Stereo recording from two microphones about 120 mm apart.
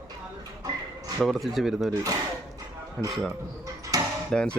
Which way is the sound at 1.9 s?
30° right (ahead or behind).